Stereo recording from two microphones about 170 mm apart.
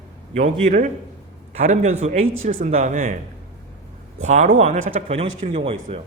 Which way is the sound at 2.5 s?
55° right (ahead or behind).